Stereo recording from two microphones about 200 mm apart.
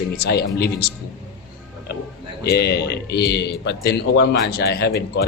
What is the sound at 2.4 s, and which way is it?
Speech, 55° left (ahead or behind).